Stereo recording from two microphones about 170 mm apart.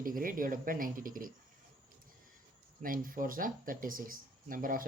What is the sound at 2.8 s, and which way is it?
Speech, 55° right (ahead or behind).